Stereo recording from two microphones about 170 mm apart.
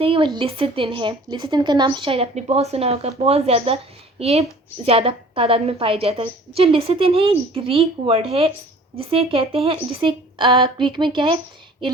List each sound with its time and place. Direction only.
0.0 s a woman's voice: 35° right (ahead or behind)